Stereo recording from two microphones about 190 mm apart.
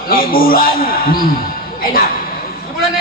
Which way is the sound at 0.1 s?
50° left (ahead or behind).